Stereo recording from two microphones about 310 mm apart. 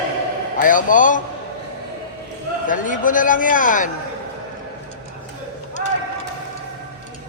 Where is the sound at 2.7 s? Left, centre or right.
Left.